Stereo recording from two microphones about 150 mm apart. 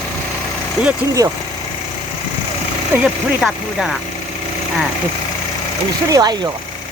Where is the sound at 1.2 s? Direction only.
25° right (ahead or behind).